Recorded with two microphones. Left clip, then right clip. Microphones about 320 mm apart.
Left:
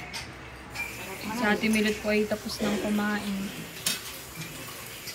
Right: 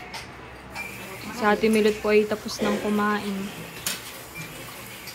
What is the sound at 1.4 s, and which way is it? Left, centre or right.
Speech, centre.